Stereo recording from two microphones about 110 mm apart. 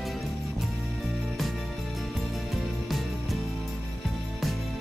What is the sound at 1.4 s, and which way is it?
Music, centre (ahead or behind).